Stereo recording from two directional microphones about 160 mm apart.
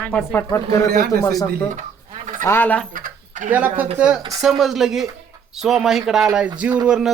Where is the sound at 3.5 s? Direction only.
10° right (ahead or behind).